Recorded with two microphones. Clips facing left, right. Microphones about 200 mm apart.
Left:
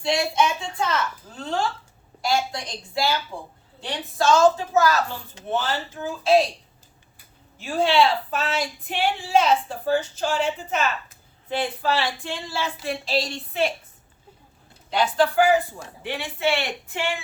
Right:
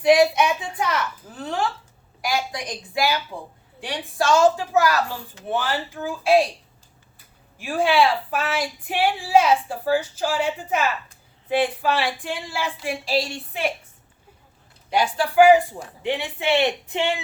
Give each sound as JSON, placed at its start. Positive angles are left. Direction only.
{"t": 0.0, "sound": "a woman's voice", "side_deg": -15}
{"t": 7.6, "sound": "speech", "side_deg": -10}
{"t": 14.8, "sound": "speech", "side_deg": -10}